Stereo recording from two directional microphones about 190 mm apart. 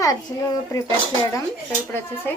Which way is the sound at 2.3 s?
10° left (ahead or behind).